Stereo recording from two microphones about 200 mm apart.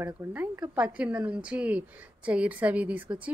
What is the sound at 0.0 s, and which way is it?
A woman's voice, 10° right (ahead or behind).